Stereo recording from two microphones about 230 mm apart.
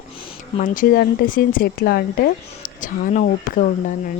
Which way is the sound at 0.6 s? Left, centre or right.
Left.